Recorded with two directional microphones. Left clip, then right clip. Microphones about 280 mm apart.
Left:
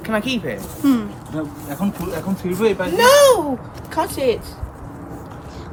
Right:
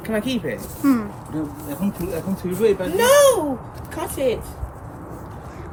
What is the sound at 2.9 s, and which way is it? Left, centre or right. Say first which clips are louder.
Speech: left 4 dB; left.